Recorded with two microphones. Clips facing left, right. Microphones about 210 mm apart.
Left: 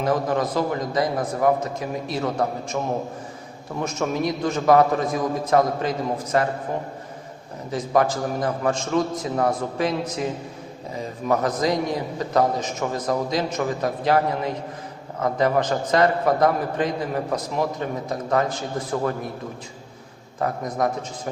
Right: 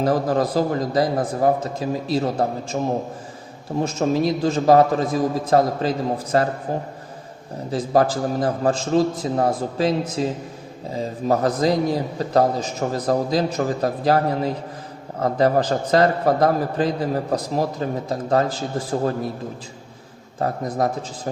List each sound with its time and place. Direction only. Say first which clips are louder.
0.0 s a man's voice: right 3 dB; 35° right (ahead or behind)
7.7 s a man's voice: right 2 dB; 35° right (ahead or behind)
20.4 s a man's voice: right 2 dB; 35° right (ahead or behind)